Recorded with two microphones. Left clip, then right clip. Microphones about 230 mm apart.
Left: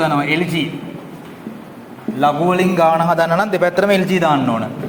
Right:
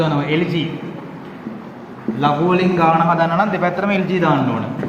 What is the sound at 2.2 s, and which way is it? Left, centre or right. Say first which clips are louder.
A man's voice: left 2 dB; left.